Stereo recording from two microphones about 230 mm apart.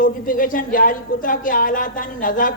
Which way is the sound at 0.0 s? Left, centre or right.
Left.